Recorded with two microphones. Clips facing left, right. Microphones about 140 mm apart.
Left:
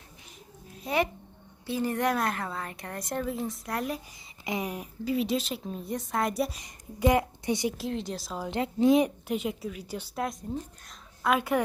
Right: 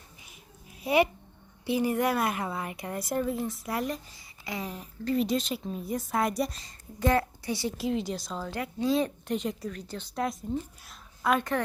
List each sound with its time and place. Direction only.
0.7 s a sound: 10° right (ahead or behind)
1.6 s speech: 10° right (ahead or behind)
4.4 s speech: 15° left (ahead or behind)
6.6 s a woman's voice: 15° left (ahead or behind)
7.8 s speech: centre (ahead or behind)
8.4 s a woman's voice: 25° left (ahead or behind)
10.2 s a woman's voice: centre (ahead or behind)